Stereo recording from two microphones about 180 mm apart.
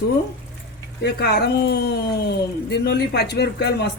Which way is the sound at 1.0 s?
65° left (ahead or behind).